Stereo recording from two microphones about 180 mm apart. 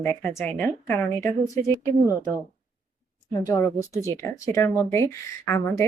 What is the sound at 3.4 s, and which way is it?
A woman's voice, 15° left (ahead or behind).